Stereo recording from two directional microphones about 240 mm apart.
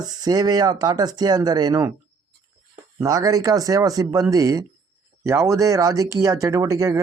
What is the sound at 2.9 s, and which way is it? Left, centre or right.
Speech, centre.